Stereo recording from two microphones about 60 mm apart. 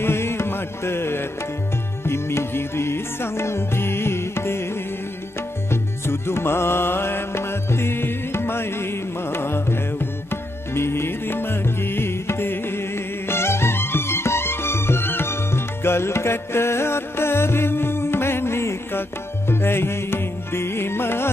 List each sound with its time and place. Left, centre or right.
0.0 s music: left
5.7 s music: left